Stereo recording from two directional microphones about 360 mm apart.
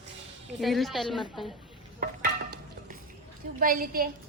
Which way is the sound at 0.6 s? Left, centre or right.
Centre.